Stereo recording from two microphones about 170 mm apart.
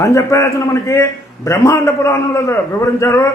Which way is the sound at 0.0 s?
15° left (ahead or behind).